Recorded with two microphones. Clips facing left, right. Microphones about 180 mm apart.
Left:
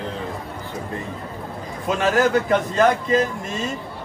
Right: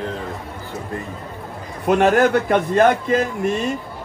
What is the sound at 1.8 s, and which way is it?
A man's voice, 60° right (ahead or behind).